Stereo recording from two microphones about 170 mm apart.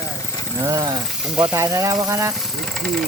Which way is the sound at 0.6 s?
20° right (ahead or behind).